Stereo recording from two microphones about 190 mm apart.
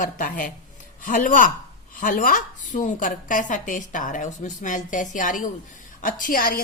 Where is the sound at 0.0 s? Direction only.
45° left (ahead or behind).